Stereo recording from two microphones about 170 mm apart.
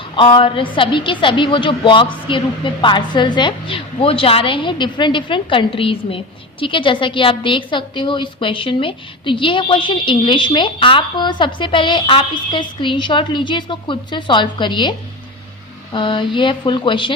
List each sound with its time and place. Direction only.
0.2 s a woman's voice: 30° left (ahead or behind)